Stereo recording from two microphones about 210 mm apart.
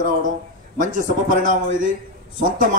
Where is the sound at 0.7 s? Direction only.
40° right (ahead or behind).